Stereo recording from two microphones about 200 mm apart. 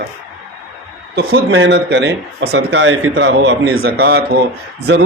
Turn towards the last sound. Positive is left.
turn(degrees=-55)  # may be behind; listen again after turning